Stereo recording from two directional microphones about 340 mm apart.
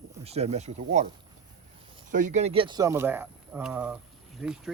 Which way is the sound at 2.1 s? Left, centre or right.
Right.